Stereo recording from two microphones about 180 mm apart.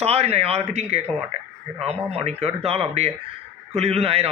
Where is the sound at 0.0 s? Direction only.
35° right (ahead or behind).